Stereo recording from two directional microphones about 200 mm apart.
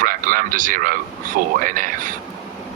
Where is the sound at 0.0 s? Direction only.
45° right (ahead or behind).